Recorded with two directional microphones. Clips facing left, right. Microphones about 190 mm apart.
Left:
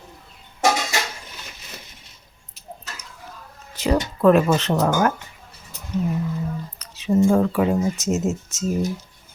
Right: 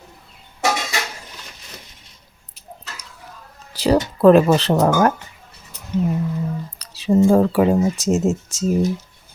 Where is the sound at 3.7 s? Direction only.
35° right (ahead or behind).